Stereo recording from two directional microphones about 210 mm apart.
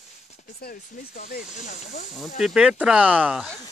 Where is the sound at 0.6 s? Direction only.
40° left (ahead or behind).